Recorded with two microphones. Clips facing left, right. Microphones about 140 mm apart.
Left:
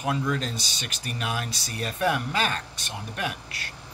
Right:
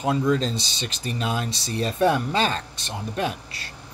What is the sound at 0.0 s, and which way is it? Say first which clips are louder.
Speech: right 5 dB; 25° right (ahead or behind).